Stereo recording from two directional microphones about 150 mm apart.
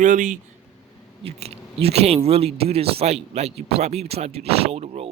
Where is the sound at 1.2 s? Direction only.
40° right (ahead or behind).